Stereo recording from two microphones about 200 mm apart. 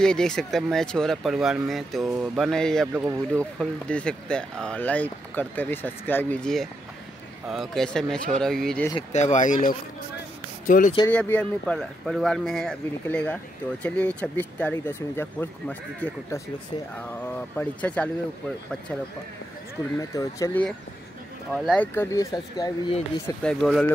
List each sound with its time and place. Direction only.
0.0 s speech: 5° left (ahead or behind)
2.9 s speech: 10° right (ahead or behind)
3.3 s speech: 5° left (ahead or behind)
9.1 s speech: 35° left (ahead or behind)
11.1 s speech: 10° left (ahead or behind)
17.6 s speech: 5° left (ahead or behind)
20.0 s speech: 15° left (ahead or behind)
21.5 s speech: centre (ahead or behind)
21.9 s speech: 15° left (ahead or behind)
23.2 s speech: 5° left (ahead or behind)